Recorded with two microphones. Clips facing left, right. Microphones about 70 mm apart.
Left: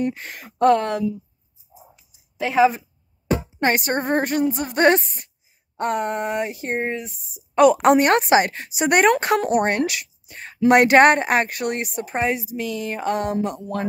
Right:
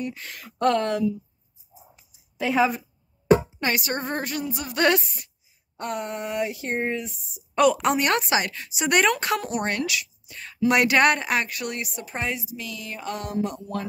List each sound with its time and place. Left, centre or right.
0.0 s speech: left
1.7 s dog: left
2.4 s a woman's voice: centre
3.5 s a woman's voice: left
5.8 s a woman's voice: left
6.7 s speech: centre
7.1 s a woman's voice: left